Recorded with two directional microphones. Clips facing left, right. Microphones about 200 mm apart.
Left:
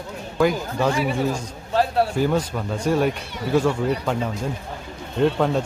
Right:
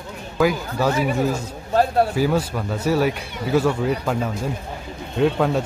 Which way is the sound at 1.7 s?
45° right (ahead or behind).